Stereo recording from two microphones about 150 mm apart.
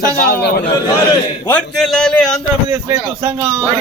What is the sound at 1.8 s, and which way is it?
Speech, 5° left (ahead or behind).